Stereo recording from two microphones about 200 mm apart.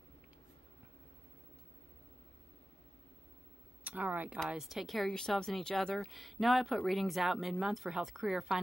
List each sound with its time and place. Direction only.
3.8 s speech: 10° right (ahead or behind)